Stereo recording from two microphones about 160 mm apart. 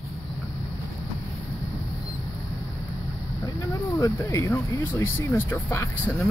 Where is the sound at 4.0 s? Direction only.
20° left (ahead or behind).